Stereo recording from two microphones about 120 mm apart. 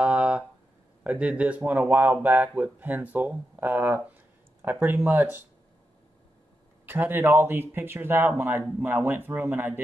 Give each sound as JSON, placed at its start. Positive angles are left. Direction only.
{"t": 0.0, "sound": "a sound", "side_deg": -10}
{"t": 1.0, "sound": "speech", "side_deg": -10}
{"t": 6.9, "sound": "speech", "side_deg": -15}